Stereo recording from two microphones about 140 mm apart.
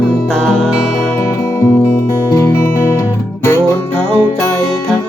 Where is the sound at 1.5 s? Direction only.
15° left (ahead or behind).